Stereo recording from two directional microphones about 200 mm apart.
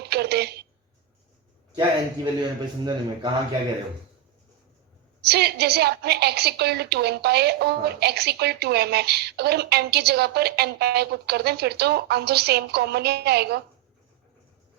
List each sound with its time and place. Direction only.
0.0 s a sound: 55° right (ahead or behind)
2.2 s a man's voice: 20° right (ahead or behind)
5.2 s a woman's voice: 55° right (ahead or behind)